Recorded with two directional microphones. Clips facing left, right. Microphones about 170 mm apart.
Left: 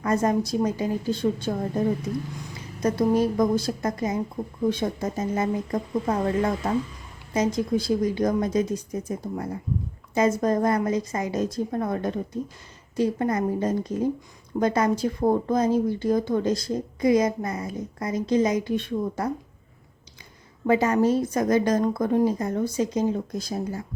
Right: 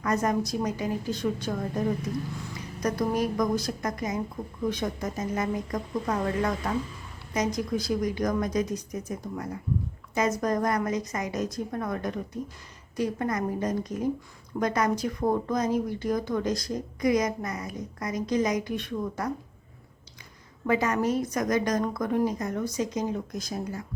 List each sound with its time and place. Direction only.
0.0 s speech: 25° left (ahead or behind)
2.8 s speech: 25° left (ahead or behind)
20.7 s speech: 30° left (ahead or behind)